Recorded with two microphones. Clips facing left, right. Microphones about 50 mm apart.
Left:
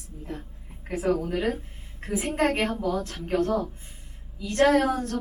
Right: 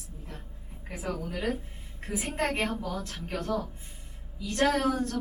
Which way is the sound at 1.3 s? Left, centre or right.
Left.